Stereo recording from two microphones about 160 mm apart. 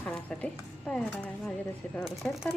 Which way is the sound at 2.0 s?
Centre (ahead or behind).